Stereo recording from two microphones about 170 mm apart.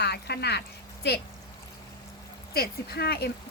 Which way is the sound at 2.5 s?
65° left (ahead or behind).